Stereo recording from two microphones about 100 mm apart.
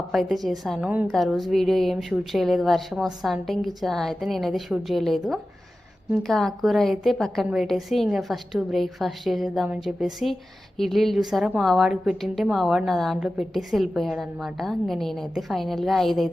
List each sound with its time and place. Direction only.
0.1 s a woman's voice: centre (ahead or behind)
0.8 s a woman's voice: 15° right (ahead or behind)
1.1 s a woman's voice: centre (ahead or behind)